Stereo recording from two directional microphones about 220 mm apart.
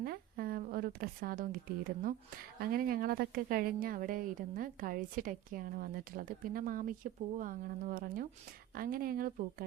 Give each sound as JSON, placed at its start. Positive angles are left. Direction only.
{"t": 0.0, "sound": "speech", "side_deg": -45}
{"t": 2.6, "sound": "speech", "side_deg": -40}